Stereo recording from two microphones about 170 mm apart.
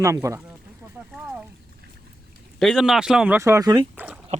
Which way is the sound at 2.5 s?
Centre (ahead or behind).